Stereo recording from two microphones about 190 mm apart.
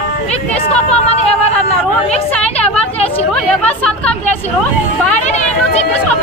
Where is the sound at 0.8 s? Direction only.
35° left (ahead or behind).